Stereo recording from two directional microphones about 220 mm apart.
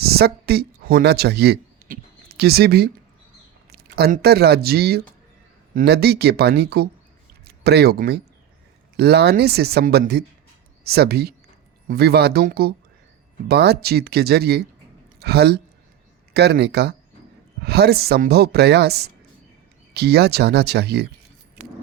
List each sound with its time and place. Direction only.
0.0 s speech: 45° right (ahead or behind)